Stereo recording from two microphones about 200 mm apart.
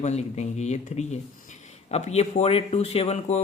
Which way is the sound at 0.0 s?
35° left (ahead or behind).